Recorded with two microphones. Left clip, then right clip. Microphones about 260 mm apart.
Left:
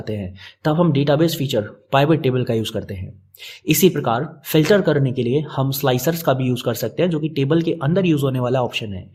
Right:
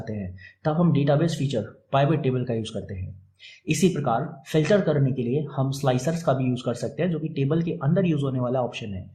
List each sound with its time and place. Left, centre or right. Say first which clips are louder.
0.6 s speech: left 6 dB; left